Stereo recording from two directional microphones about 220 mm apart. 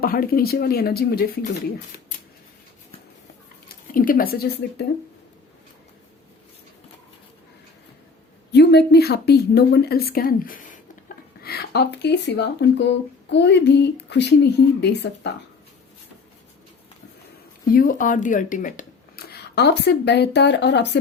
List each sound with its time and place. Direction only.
0.0 s speech: 40° left (ahead or behind)
3.9 s a woman's voice: 40° left (ahead or behind)
8.5 s speech: 50° left (ahead or behind)
17.7 s speech: 40° left (ahead or behind)